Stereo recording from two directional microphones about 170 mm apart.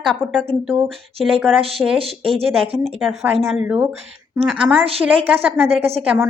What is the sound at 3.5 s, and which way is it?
A woman's voice, 10° right (ahead or behind).